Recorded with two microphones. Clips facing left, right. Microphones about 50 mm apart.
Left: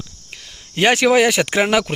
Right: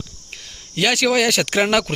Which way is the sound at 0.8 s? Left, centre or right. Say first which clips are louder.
Left 4 dB; left.